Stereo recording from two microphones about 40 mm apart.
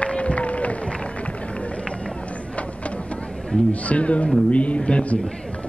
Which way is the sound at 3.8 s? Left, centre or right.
Left.